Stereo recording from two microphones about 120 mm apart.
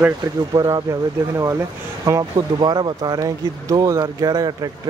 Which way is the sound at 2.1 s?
25° right (ahead or behind).